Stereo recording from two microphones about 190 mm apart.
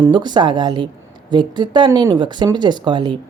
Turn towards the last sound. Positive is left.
turn(degrees=-25)  # may be behind; listen again after turning